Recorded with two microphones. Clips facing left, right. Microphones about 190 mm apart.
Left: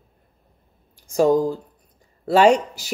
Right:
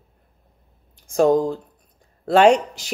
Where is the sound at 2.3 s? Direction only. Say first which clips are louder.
Right 1 dB; 55° right (ahead or behind).